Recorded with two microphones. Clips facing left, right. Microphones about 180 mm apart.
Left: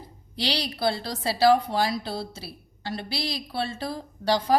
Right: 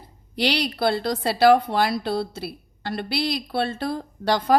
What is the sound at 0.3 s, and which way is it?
A woman's voice, 60° right (ahead or behind).